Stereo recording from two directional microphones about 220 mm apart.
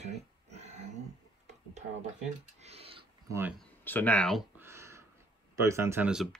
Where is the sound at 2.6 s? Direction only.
30° right (ahead or behind).